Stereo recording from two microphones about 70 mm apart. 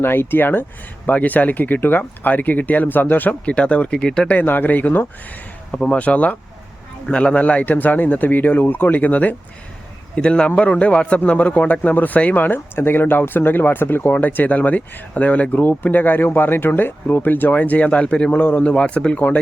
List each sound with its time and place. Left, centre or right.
0.0 s a man's voice: left; by 4.4 s centre
4.4 s a man's voice: left
5.7 s a man's voice: centre